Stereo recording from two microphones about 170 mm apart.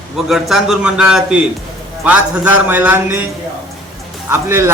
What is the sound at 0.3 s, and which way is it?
A man's voice, centre (ahead or behind).